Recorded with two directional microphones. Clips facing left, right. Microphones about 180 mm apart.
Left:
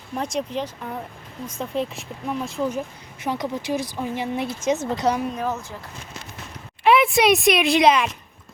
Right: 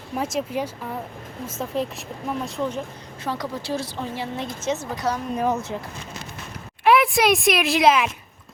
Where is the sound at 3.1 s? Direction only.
15° left (ahead or behind).